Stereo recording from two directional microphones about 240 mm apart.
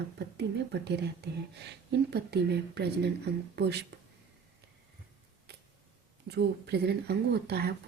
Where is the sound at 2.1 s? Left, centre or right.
Right.